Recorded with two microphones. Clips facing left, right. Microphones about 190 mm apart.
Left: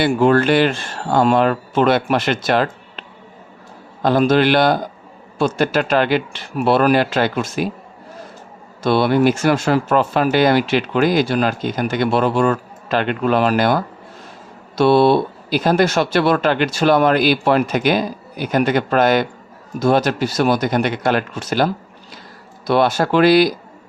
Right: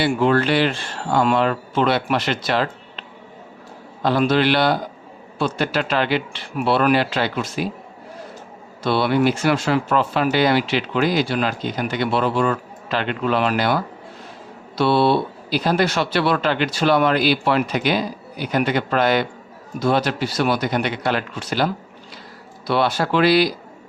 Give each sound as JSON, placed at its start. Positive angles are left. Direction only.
{"t": 0.0, "sound": "speech", "side_deg": 45}
{"t": 4.0, "sound": "speech", "side_deg": 45}
{"t": 8.8, "sound": "speech", "side_deg": 45}
{"t": 14.8, "sound": "speech", "side_deg": 45}